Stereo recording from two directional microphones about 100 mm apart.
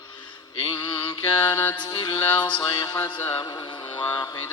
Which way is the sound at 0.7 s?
50° left (ahead or behind).